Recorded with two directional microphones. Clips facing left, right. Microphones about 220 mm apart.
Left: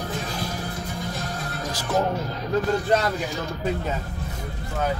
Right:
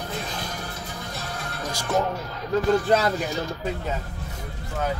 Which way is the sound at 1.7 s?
5° left (ahead or behind).